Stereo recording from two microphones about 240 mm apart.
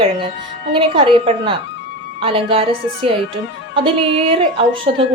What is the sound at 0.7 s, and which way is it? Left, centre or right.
A woman's voice, right.